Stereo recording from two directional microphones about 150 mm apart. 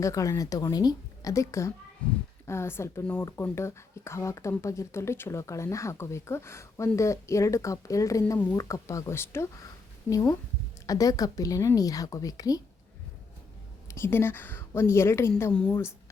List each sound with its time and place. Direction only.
0.0 s speech: 20° left (ahead or behind)
2.0 s speech: 10° left (ahead or behind); by 12.6 s 25° left (ahead or behind)
13.8 s speech: 15° left (ahead or behind)